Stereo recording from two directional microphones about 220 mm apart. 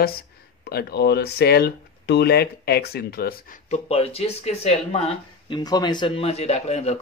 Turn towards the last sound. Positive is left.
turn(degrees=30)  # may be behind; listen again after turning